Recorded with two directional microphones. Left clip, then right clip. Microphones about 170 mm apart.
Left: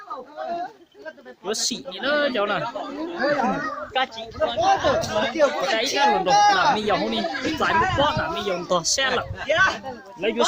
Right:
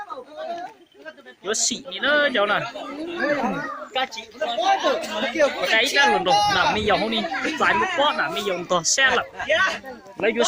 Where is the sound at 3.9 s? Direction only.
55° right (ahead or behind).